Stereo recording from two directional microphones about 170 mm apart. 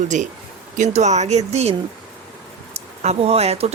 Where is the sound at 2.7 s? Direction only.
40° right (ahead or behind).